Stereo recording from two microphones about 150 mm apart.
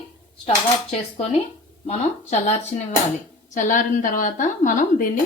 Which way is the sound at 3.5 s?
60° left (ahead or behind).